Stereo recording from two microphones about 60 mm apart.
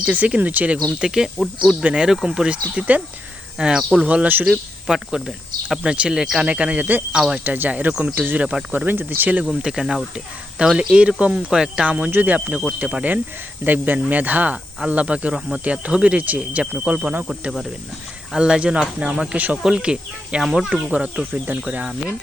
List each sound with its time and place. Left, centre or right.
0.0 s speech: right
1.0 s speech: centre
3.6 s speech: centre
4.0 s speech: right
4.4 s speech: centre
6.4 s speech: right
9.5 s speech: centre
18.3 s speech: centre